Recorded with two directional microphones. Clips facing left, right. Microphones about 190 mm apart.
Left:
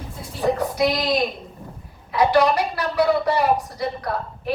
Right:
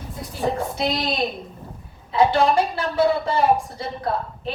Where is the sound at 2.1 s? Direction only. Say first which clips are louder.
Even; 25° right (ahead or behind).